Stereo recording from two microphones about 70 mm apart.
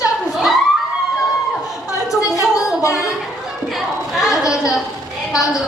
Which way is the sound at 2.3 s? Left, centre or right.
Left.